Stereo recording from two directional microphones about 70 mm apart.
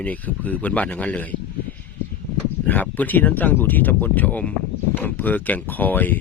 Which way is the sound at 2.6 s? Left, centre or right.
Left.